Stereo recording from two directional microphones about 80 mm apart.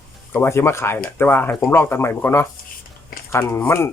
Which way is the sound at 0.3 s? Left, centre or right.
Left.